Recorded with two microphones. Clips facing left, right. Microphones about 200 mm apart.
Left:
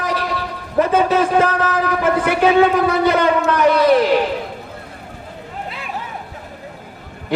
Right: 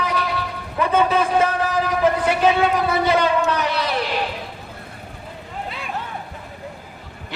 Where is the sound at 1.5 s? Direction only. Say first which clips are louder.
Left 3 dB; 60° left (ahead or behind).